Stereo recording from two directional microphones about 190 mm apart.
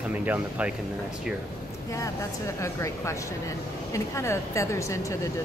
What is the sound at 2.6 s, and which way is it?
Speech, 15° left (ahead or behind).